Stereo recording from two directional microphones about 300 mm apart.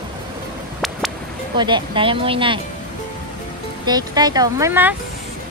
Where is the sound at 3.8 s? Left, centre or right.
Centre.